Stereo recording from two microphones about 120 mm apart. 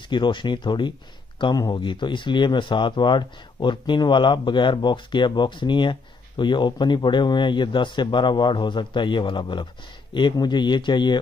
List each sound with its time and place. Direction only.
0.0 s speech: 40° left (ahead or behind)